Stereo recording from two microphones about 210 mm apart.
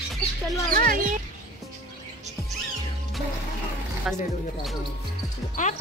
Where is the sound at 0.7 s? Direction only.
40° right (ahead or behind).